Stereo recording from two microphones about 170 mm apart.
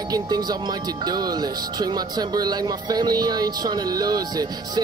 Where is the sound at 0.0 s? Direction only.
25° right (ahead or behind).